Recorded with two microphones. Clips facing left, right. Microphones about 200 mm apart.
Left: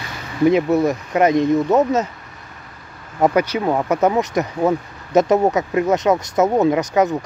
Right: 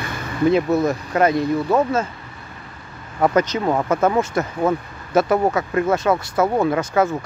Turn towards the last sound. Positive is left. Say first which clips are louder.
# left 2 dB
turn(degrees=15)  # may be behind; listen again after turning